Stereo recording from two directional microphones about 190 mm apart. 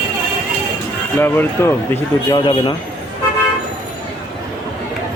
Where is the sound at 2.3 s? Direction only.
25° left (ahead or behind).